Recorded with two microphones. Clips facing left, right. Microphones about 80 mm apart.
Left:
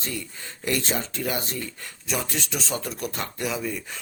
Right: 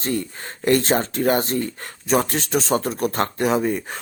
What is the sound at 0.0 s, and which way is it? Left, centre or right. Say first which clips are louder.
Speech: right 9 dB; right.